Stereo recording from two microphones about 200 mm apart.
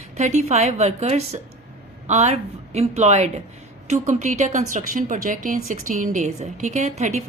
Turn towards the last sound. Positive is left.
turn(degrees=-35)  # may be behind; listen again after turning